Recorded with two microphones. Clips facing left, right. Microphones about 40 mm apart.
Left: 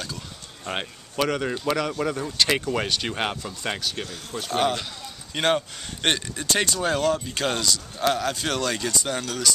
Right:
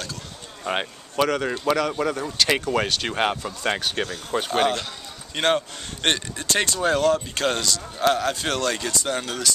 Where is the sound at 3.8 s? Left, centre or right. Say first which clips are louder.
Right 4 dB; right.